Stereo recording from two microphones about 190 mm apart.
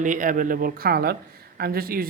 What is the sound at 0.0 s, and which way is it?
Speech, 45° right (ahead or behind).